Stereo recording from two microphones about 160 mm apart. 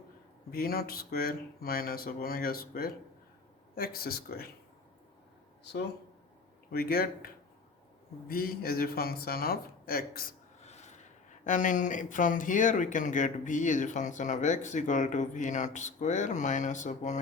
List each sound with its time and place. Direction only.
0.5 s speech: 70° left (ahead or behind)
6.7 s speech: 70° left (ahead or behind)
8.3 s speech: 65° left (ahead or behind)
10.6 s a sound: 45° left (ahead or behind)
11.4 s speech: 50° left (ahead or behind)